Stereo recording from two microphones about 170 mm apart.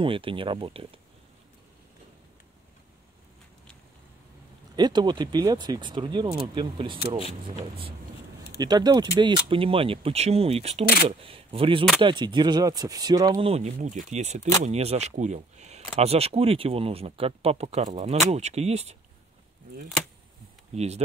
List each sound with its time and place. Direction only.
0.0 s speech: 30° right (ahead or behind)
4.7 s speech: 25° right (ahead or behind)
8.5 s speech: 25° right (ahead or behind)
13.5 s speech: 40° right (ahead or behind)
20.7 s speech: 40° right (ahead or behind)